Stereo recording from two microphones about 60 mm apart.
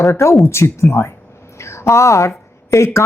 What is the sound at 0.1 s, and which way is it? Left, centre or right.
A man's voice, left.